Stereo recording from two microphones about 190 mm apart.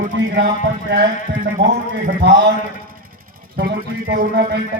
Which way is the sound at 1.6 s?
65° right (ahead or behind).